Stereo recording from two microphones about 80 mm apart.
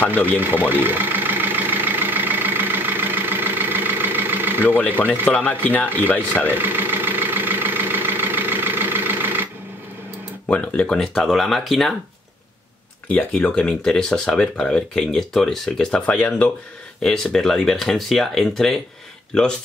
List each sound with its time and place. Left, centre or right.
0.4 s vehicle: right
4.7 s speech: centre
6.4 s vehicle: right
10.5 s speech: centre
13.1 s speech: centre